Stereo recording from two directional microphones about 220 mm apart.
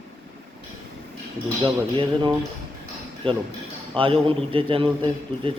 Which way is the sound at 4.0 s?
25° right (ahead or behind).